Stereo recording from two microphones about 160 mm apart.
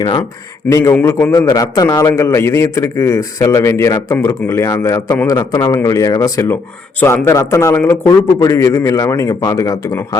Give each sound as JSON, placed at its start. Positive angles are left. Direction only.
{"t": 0.7, "sound": "a man's voice", "side_deg": 20}